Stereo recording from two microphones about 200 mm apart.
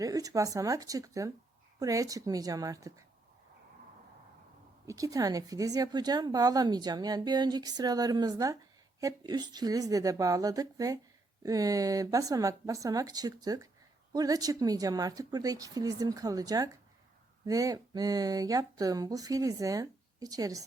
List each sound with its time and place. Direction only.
0.0 s speech: 20° right (ahead or behind)
4.9 s a woman's voice: 15° right (ahead or behind)